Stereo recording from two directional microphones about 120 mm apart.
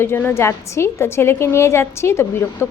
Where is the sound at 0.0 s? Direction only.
20° left (ahead or behind).